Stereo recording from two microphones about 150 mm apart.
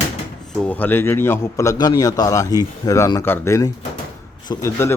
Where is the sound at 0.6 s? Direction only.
10° left (ahead or behind).